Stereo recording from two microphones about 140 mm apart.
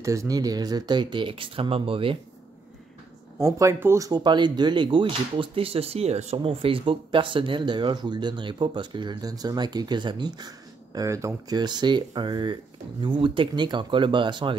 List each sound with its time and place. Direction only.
0.0 s speech: 20° right (ahead or behind); by 2.1 s 40° right (ahead or behind)
3.3 s speech: 20° right (ahead or behind)
11.0 s speech: 20° right (ahead or behind)